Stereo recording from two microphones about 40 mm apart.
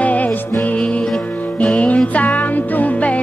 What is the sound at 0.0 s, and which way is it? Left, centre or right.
Music, left.